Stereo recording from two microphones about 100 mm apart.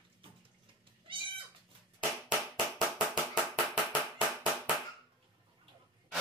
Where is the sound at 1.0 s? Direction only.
60° right (ahead or behind).